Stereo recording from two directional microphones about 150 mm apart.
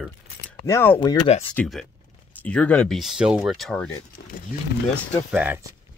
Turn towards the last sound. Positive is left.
turn(degrees=-10)  # may be behind; listen again after turning